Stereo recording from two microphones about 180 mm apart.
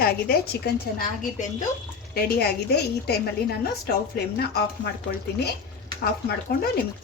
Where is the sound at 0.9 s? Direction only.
50° left (ahead or behind).